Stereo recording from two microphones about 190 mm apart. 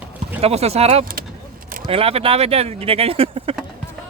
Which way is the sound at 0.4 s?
35° right (ahead or behind).